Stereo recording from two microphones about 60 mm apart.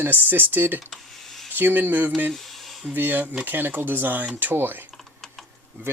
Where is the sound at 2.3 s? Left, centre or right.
Centre.